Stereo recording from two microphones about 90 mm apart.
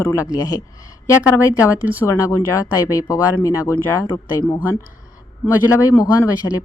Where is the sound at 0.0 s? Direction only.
35° left (ahead or behind).